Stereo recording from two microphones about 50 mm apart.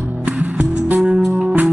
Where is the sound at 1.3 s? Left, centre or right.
Centre.